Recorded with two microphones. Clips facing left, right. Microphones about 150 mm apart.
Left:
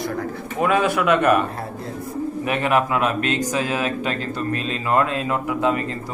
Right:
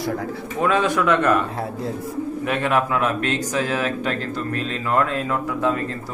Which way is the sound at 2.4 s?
10° left (ahead or behind).